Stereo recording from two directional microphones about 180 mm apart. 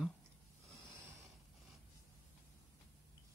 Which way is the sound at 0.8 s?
15° right (ahead or behind).